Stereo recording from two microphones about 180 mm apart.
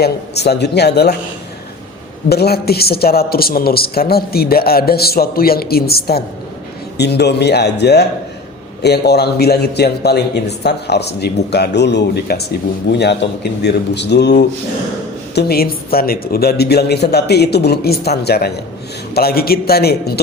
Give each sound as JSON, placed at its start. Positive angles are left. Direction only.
{"t": 0.0, "sound": "a man's voice", "side_deg": 65}
{"t": 2.3, "sound": "a man's voice", "side_deg": 60}
{"t": 15.4, "sound": "speech", "side_deg": 60}